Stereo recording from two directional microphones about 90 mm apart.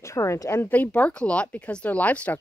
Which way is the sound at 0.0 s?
35° left (ahead or behind).